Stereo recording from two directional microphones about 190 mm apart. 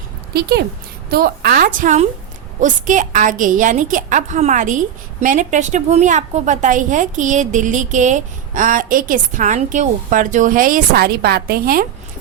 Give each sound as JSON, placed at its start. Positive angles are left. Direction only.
{"t": 0.3, "sound": "a woman's voice", "side_deg": -55}